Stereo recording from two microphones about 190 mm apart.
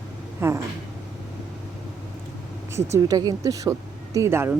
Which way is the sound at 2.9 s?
20° right (ahead or behind).